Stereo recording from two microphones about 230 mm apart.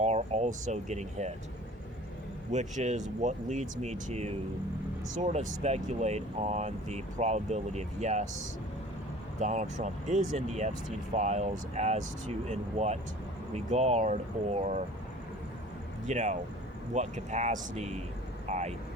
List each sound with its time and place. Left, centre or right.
0.0 s speech: right
2.5 s speech: right
9.4 s speech: right
16.0 s speech: right